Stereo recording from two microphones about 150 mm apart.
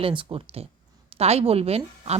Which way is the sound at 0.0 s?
35° right (ahead or behind).